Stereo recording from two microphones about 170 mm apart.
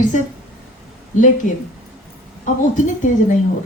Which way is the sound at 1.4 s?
50° left (ahead or behind).